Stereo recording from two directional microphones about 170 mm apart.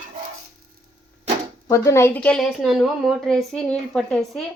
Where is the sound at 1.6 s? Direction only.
20° left (ahead or behind); by 4.4 s centre (ahead or behind).